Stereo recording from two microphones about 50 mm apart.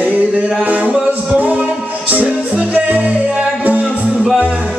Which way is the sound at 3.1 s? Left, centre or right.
Centre.